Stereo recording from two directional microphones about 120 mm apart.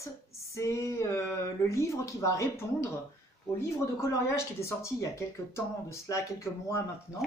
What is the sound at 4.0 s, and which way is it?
Speech, 25° left (ahead or behind).